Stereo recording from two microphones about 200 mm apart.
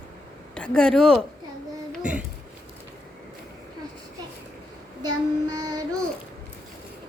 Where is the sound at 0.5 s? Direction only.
5° left (ahead or behind).